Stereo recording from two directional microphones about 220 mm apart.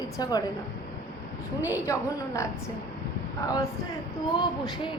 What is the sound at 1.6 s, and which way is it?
Speech, 10° right (ahead or behind).